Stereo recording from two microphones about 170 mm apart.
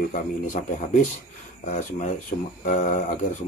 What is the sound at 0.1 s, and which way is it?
Speech, 50° left (ahead or behind).